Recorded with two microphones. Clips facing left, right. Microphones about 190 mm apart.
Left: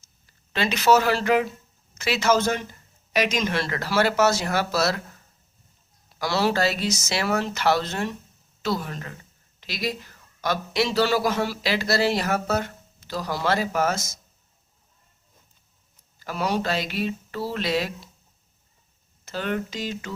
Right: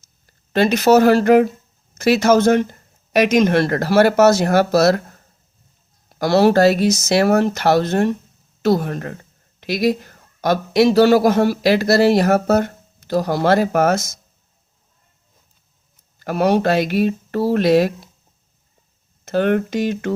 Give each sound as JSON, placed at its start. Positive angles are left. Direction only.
{"t": 0.3, "sound": "a man's voice", "side_deg": -45}
{"t": 16.2, "sound": "a man's voice", "side_deg": -55}
{"t": 19.2, "sound": "speech", "side_deg": -55}